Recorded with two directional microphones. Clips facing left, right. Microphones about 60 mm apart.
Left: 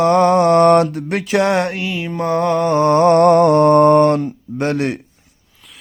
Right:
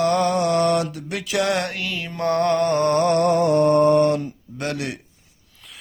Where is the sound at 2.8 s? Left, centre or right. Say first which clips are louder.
Left 10 dB; left.